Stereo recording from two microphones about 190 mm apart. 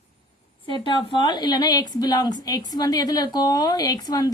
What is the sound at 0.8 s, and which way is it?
A woman's voice, 25° left (ahead or behind).